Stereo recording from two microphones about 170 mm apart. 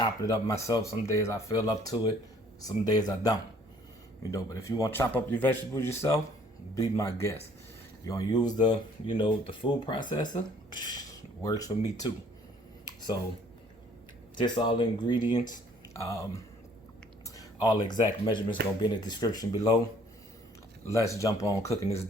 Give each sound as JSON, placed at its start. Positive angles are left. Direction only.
{"t": 0.0, "sound": "a man's voice", "side_deg": 20}
{"t": 12.8, "sound": "a sound", "side_deg": 25}
{"t": 14.3, "sound": "speech", "side_deg": 25}
{"t": 16.0, "sound": "a man's voice", "side_deg": 15}
{"t": 20.8, "sound": "speech", "side_deg": 15}